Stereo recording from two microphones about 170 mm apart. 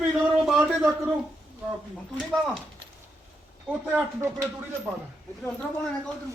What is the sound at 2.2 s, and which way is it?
Speech, centre (ahead or behind).